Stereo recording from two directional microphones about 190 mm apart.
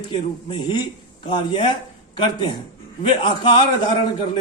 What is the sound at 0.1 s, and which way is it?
A man's voice, 25° left (ahead or behind).